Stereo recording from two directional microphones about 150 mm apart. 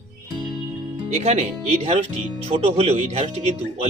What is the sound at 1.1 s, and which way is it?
Speech, 45° right (ahead or behind).